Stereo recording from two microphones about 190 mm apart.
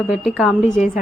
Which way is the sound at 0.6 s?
40° left (ahead or behind).